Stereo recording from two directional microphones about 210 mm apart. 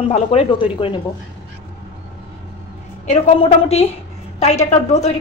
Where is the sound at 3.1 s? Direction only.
30° left (ahead or behind).